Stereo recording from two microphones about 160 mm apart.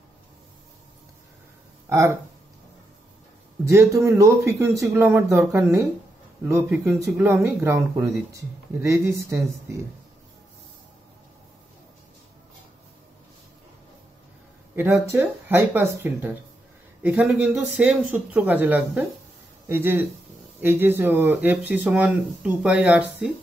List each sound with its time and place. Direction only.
1.9 s speech: 20° right (ahead or behind)
3.6 s speech: 20° right (ahead or behind)
15.0 s speech: 15° right (ahead or behind)